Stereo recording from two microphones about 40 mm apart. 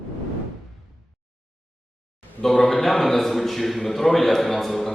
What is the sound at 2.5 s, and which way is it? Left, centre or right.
Speech, left.